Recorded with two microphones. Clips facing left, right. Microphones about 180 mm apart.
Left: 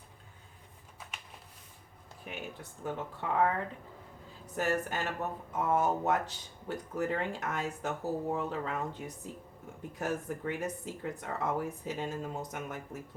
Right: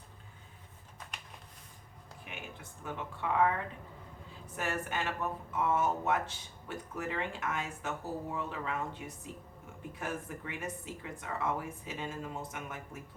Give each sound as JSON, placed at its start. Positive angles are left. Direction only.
{"t": 2.2, "sound": "speech", "side_deg": 40}
{"t": 4.5, "sound": "speech", "side_deg": 40}